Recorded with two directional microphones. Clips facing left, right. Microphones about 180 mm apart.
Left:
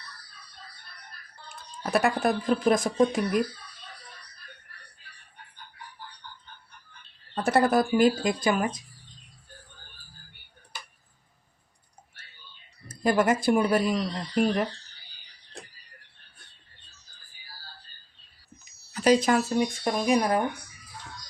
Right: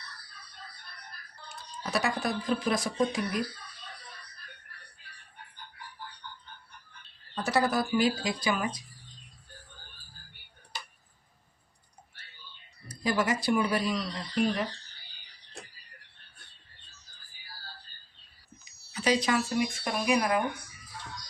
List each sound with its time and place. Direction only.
1.5 s speech: 55° left (ahead or behind)
7.4 s speech: 55° left (ahead or behind)
12.9 s speech: 50° left (ahead or behind)
18.6 s speech: 50° left (ahead or behind)